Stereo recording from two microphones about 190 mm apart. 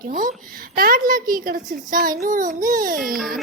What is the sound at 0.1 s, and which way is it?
A child's voice, 45° right (ahead or behind).